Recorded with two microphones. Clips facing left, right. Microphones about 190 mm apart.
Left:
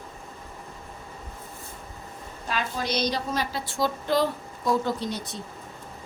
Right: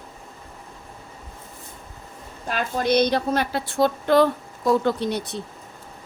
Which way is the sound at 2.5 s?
55° right (ahead or behind).